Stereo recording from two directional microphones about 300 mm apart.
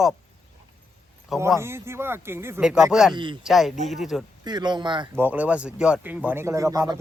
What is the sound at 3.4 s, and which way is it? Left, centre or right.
Speech, centre.